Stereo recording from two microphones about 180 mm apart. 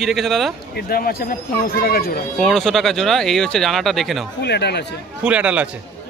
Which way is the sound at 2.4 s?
5° left (ahead or behind).